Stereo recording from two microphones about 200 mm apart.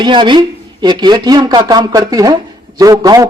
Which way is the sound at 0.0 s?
25° right (ahead or behind).